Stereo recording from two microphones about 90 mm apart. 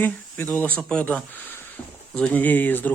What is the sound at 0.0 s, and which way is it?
Speech, 20° left (ahead or behind).